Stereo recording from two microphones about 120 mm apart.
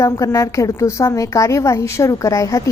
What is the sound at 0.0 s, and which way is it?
A woman's voice, 25° left (ahead or behind).